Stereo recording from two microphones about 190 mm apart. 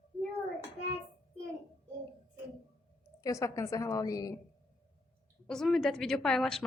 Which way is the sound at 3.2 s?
15° left (ahead or behind).